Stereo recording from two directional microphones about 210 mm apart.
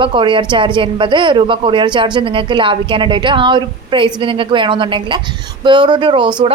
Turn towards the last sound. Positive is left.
turn(degrees=-20)  # may be behind; listen again after turning